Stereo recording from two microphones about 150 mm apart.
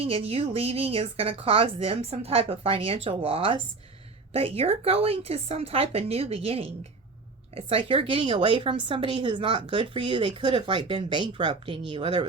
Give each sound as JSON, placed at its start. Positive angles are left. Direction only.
{"t": 0.0, "sound": "a woman's voice", "side_deg": -40}